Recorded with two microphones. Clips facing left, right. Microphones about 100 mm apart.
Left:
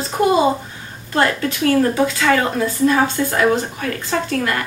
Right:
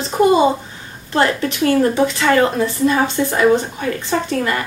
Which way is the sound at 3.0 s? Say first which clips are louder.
Right 1 dB; 20° right (ahead or behind).